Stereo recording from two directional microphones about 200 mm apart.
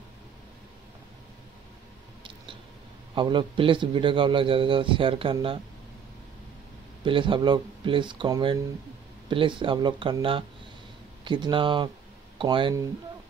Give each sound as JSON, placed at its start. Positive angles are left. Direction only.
{"t": 3.2, "sound": "a man's voice", "side_deg": -25}
{"t": 7.1, "sound": "a man's voice", "side_deg": -25}